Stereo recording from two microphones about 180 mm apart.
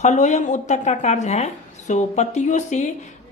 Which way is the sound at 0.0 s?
40° left (ahead or behind).